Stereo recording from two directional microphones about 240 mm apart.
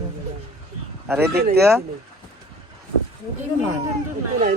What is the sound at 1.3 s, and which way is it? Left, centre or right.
Speech, right.